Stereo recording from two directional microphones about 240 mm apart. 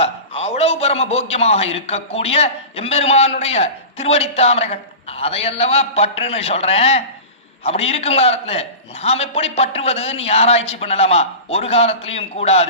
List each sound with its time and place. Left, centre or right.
0.0 s a man's voice: left